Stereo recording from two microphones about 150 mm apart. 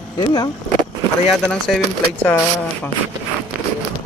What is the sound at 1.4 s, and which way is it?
Speech, 5° left (ahead or behind).